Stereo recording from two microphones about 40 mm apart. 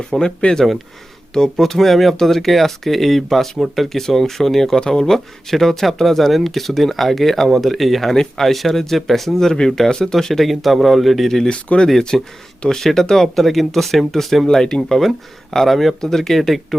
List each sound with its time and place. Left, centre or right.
0.1 s speech: left; by 11.3 s centre
11.4 s speech: left
12.1 s speech: centre
12.6 s speech: centre
14.4 s speech: centre
14.8 s speech: centre